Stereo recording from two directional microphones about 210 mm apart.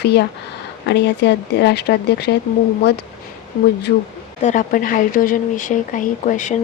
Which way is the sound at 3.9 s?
45° left (ahead or behind).